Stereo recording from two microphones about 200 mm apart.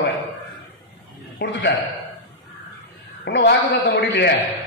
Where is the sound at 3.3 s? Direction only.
55° left (ahead or behind).